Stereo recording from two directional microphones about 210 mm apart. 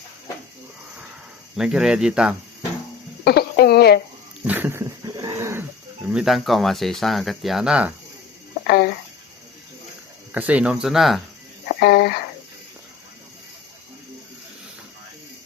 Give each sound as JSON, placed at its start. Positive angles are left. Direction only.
{"t": 1.5, "sound": "speech", "side_deg": -5}
{"t": 3.2, "sound": "speech", "side_deg": 50}
{"t": 4.4, "sound": "dog", "side_deg": -10}
{"t": 6.1, "sound": "speech", "side_deg": 0}
{"t": 8.6, "sound": "a sound", "side_deg": 45}
{"t": 10.3, "sound": "speech", "side_deg": -5}
{"t": 11.8, "sound": "speech", "side_deg": 50}